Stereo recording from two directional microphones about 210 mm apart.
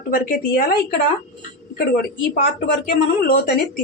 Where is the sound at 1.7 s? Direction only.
45° left (ahead or behind).